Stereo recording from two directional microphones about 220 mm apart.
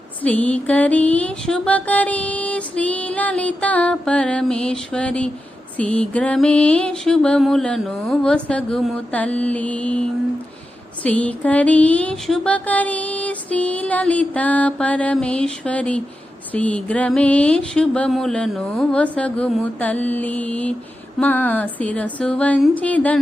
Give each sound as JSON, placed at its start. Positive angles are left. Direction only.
{"t": 0.2, "sound": "music", "side_deg": 5}